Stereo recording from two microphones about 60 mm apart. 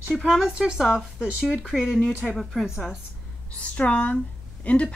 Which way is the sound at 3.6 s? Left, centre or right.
Left.